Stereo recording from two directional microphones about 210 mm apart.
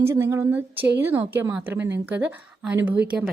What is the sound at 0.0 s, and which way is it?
A woman's voice, 10° right (ahead or behind).